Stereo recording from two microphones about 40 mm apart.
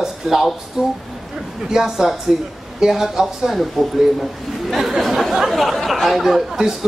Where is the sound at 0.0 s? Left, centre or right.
Centre.